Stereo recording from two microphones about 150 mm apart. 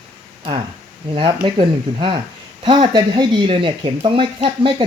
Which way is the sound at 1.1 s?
35° right (ahead or behind).